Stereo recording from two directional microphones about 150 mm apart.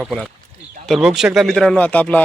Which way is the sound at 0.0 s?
Centre (ahead or behind).